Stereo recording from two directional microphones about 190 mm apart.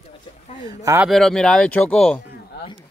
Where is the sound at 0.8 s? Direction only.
15° right (ahead or behind).